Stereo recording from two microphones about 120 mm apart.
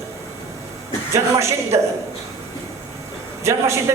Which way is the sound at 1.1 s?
25° right (ahead or behind).